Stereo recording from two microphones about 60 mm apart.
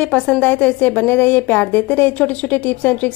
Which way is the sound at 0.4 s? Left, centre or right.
Left.